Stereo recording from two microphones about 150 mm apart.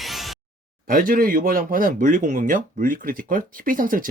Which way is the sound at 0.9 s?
70° right (ahead or behind).